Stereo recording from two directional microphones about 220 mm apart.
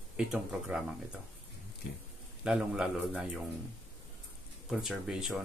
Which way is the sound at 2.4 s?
5° right (ahead or behind).